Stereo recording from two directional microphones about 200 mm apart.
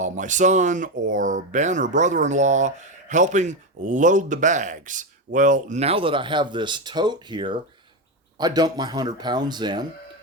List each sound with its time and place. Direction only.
0.0 s speech: 40° right (ahead or behind); by 9.8 s 20° right (ahead or behind)